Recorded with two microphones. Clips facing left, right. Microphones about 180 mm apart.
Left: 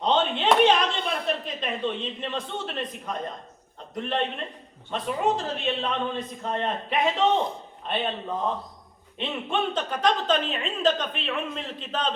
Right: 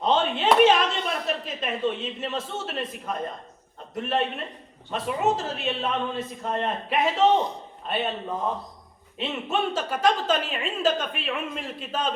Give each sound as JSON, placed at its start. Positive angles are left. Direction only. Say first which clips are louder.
{"t": 0.0, "sound": "a sound", "louder": "right 1 dB", "side_deg": -5}
{"t": 3.9, "sound": "a man's voice", "louder": "right 1 dB", "side_deg": -5}
{"t": 9.1, "sound": "a woman's voice", "louder": "right 1 dB", "side_deg": -5}